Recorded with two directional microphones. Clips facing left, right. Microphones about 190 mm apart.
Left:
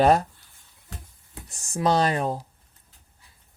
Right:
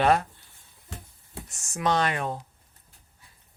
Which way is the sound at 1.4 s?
35° left (ahead or behind).